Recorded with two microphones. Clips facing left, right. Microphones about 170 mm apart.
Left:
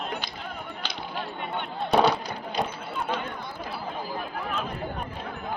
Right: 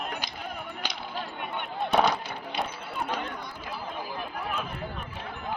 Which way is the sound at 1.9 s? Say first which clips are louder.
Left 3 dB; 35° left (ahead or behind).